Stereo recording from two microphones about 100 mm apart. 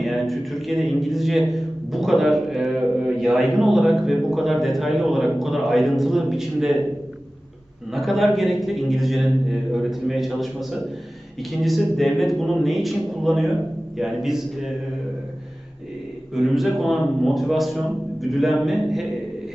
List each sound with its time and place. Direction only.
0.0 s a man's voice: centre (ahead or behind)
7.9 s a man's voice: centre (ahead or behind)
16.3 s a man's voice: 5° right (ahead or behind)